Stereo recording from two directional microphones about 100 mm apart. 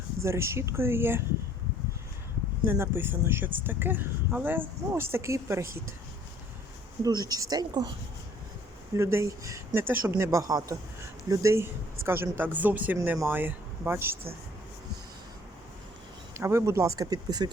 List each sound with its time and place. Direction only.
0.2 s speech: 30° right (ahead or behind)
2.6 s speech: 25° right (ahead or behind)
7.0 s speech: 40° right (ahead or behind)
9.0 s speech: 30° right (ahead or behind)
16.4 s speech: 25° right (ahead or behind)